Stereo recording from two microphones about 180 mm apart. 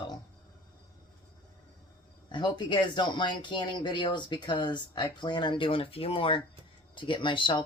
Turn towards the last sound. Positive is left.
turn(degrees=25)  # may be behind; listen again after turning